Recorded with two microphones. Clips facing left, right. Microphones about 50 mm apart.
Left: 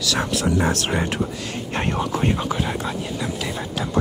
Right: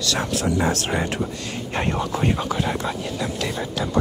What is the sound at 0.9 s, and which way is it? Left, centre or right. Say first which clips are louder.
Speech: left 1 dB; centre.